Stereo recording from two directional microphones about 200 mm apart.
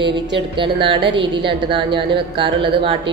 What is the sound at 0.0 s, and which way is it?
A woman's voice, 25° right (ahead or behind).